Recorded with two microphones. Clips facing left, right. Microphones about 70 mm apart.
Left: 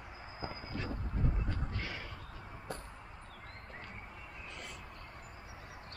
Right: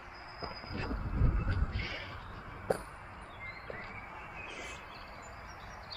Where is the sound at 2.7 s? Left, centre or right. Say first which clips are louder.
Right 11 dB; right.